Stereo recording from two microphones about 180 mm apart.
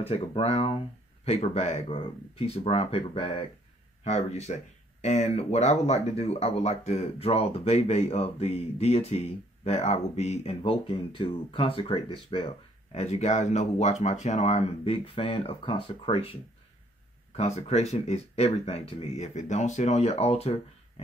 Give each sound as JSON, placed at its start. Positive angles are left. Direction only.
{"t": 0.0, "sound": "speech", "side_deg": 35}
{"t": 17.4, "sound": "speech", "side_deg": 35}